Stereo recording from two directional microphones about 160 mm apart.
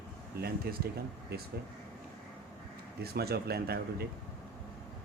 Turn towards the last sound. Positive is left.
turn(degrees=-80)